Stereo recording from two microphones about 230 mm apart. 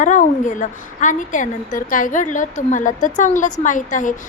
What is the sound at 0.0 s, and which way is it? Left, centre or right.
A woman's voice, left.